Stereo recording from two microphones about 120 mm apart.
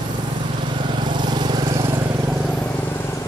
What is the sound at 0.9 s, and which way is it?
Vehicle, 40° right (ahead or behind).